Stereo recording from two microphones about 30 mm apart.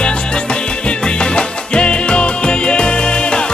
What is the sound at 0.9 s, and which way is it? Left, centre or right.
Music, left.